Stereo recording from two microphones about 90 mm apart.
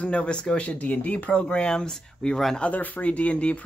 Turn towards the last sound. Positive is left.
turn(degrees=15)  # may be behind; listen again after turning